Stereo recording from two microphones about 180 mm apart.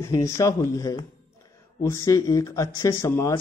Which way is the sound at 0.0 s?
15° left (ahead or behind).